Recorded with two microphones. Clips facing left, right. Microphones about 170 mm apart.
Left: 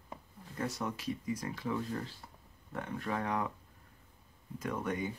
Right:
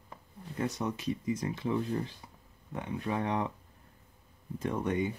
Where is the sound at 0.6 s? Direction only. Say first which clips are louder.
Right 4 dB; 20° right (ahead or behind).